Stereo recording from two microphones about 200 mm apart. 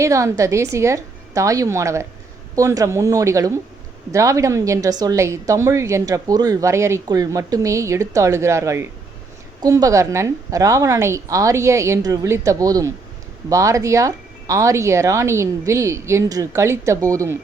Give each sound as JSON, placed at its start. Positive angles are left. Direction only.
{"t": 0.0, "sound": "a woman's voice", "side_deg": -15}